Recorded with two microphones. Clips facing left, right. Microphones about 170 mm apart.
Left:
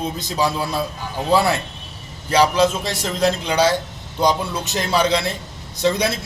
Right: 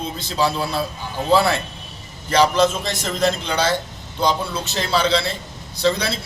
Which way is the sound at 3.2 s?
10° left (ahead or behind).